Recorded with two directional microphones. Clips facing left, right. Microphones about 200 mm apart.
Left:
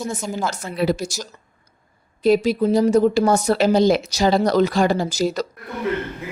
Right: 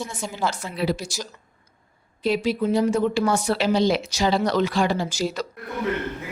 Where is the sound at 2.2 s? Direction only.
40° left (ahead or behind).